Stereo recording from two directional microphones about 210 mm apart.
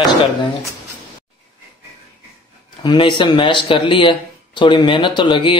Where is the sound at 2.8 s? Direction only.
20° left (ahead or behind).